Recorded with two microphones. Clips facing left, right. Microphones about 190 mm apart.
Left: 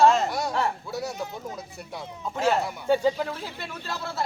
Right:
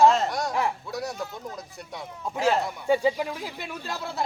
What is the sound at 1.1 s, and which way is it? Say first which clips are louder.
Speech: left 1 dB; 20° left (ahead or behind).